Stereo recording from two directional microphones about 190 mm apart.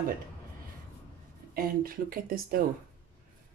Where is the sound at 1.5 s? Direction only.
50° right (ahead or behind).